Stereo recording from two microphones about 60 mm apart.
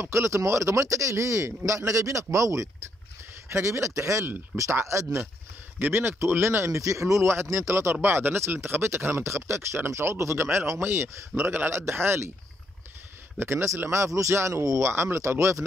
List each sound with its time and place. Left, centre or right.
0.0 s speech: right
3.4 s speech: right
5.8 s speech: right
13.4 s speech: right
14.8 s speech: right